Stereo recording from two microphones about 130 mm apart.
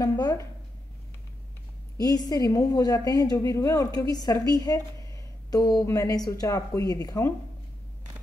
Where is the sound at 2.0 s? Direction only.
30° left (ahead or behind).